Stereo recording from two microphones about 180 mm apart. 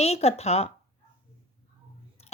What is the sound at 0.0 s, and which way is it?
Speech, 35° left (ahead or behind).